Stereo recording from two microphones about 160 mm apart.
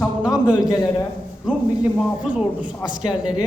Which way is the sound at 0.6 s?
25° left (ahead or behind).